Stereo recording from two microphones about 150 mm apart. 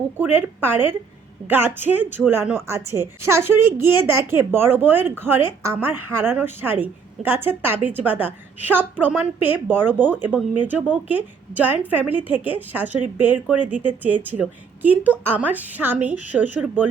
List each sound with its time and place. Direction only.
0.2 s a woman's voice: 15° right (ahead or behind)